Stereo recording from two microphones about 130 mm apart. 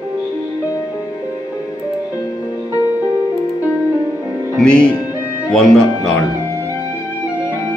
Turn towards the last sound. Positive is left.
turn(degrees=5)  # may be behind; listen again after turning